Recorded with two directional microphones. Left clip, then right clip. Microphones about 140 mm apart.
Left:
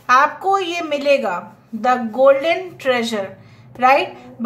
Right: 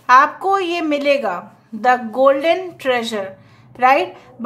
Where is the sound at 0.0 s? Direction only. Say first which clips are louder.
Right 2 dB; 30° right (ahead or behind).